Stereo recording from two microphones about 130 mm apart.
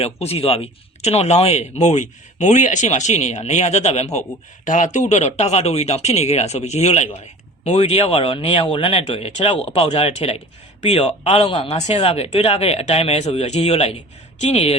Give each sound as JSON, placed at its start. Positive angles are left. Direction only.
{"t": 0.0, "sound": "speech", "side_deg": 50}